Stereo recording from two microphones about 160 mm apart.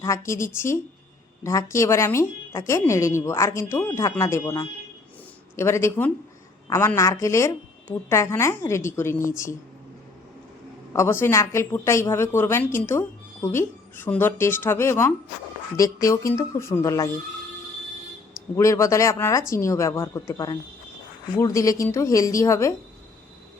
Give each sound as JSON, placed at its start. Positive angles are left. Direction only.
{"t": 0.0, "sound": "speech", "side_deg": 20}
{"t": 10.9, "sound": "a woman's voice", "side_deg": 15}
{"t": 18.5, "sound": "a woman's voice", "side_deg": 20}